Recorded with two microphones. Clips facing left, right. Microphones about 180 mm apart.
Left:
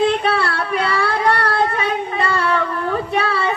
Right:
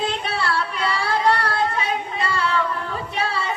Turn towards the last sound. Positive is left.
turn(degrees=60)  # may be behind; listen again after turning